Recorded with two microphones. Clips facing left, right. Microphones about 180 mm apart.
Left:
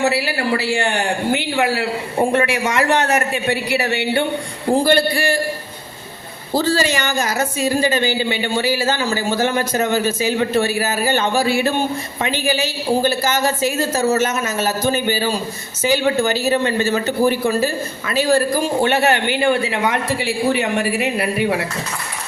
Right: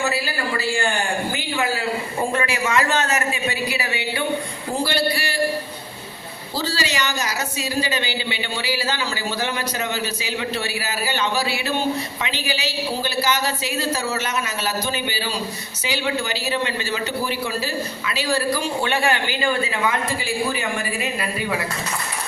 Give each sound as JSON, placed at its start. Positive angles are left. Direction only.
{"t": 0.0, "sound": "a man's voice", "side_deg": 70}
{"t": 4.7, "sound": "speech", "side_deg": 50}
{"t": 6.5, "sound": "speech", "side_deg": 50}
{"t": 19.3, "sound": "a man's voice", "side_deg": 65}